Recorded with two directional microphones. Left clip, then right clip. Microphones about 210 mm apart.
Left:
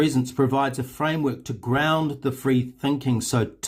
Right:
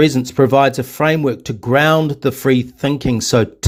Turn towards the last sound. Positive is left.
turn(degrees=-30)  # may be behind; listen again after turning